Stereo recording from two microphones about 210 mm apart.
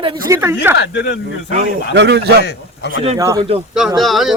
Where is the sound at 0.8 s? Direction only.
55° left (ahead or behind).